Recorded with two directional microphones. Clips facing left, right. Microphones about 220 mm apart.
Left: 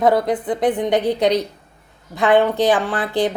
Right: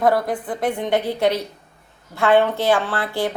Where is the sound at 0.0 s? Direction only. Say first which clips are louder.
Left 3 dB; 20° left (ahead or behind).